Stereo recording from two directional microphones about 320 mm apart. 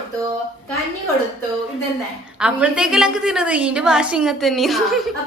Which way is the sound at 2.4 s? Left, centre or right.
Centre.